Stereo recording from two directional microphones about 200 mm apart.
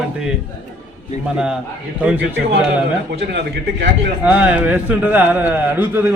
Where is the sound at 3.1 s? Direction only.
55° right (ahead or behind).